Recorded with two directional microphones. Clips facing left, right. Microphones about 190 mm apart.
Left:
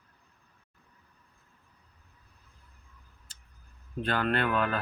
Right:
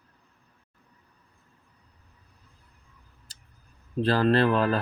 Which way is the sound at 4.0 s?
35° right (ahead or behind).